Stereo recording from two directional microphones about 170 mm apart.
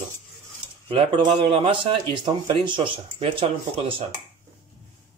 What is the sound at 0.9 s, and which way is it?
Speech, 30° right (ahead or behind).